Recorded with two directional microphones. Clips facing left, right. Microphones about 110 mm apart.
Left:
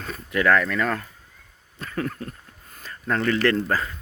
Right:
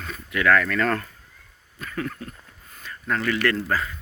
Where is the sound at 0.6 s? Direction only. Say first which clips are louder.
Right 1 dB; 15° left (ahead or behind).